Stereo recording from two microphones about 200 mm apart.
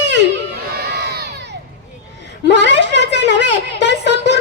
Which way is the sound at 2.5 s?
60° right (ahead or behind).